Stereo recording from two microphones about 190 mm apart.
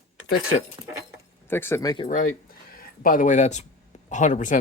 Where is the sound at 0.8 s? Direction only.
20° right (ahead or behind).